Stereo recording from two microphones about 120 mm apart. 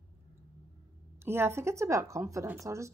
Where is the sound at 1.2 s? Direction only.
20° right (ahead or behind).